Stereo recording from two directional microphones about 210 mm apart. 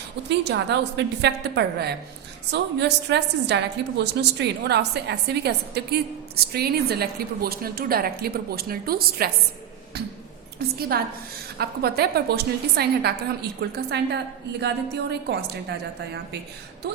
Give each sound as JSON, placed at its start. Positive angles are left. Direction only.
{"t": 0.3, "sound": "a woman's voice", "side_deg": -55}
{"t": 10.8, "sound": "a woman's voice", "side_deg": -45}